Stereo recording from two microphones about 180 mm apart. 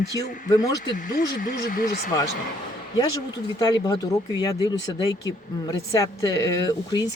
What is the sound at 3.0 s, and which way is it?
Speech, 20° left (ahead or behind).